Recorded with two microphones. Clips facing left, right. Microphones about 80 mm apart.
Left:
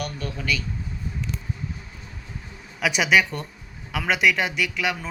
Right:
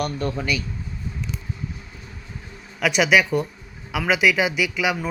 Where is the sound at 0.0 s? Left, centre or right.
Right.